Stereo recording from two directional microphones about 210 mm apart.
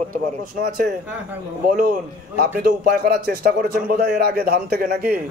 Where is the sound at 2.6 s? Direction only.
45° right (ahead or behind).